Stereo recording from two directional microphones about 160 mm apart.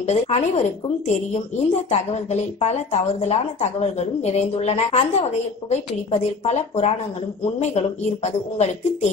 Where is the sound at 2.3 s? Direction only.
45° left (ahead or behind).